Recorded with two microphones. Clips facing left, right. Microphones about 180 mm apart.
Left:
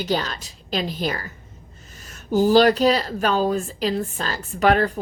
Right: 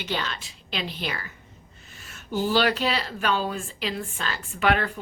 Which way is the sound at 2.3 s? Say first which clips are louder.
Left 8 dB; 40° left (ahead or behind).